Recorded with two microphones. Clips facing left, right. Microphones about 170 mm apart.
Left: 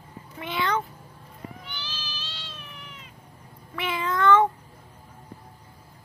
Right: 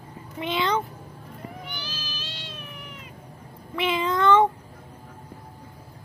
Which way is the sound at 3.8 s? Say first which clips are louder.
Right 3 dB; 20° right (ahead or behind).